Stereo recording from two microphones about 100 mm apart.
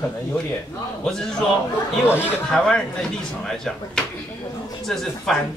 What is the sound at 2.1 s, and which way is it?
Speech, 15° right (ahead or behind).